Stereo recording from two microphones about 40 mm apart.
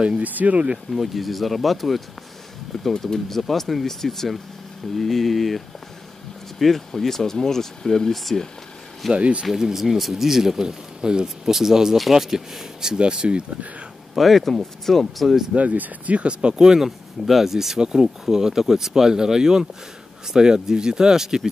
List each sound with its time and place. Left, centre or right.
0.2 s speech: right
0.9 s speech: centre
2.8 s speech: centre
6.6 s speech: centre
9.1 s speech: right
9.5 s speech: centre
12.9 s speech: right
14.1 s speech: centre
15.5 s speech: right; by 17.7 s centre
17.7 s speech: centre